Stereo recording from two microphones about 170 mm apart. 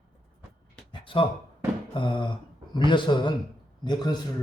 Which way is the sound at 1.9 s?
30° left (ahead or behind).